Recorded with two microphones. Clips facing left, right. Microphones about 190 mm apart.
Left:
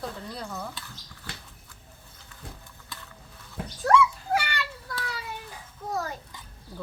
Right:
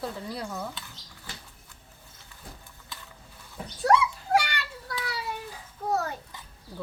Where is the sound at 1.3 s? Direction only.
70° left (ahead or behind).